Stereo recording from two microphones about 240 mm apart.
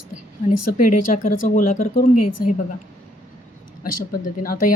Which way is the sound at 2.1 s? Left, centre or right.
Left.